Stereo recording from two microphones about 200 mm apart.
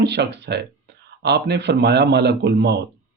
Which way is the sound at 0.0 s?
60° right (ahead or behind).